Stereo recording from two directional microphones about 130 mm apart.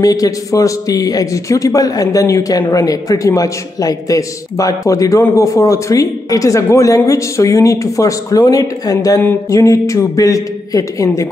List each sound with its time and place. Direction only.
0.0 s a man's voice: 25° left (ahead or behind)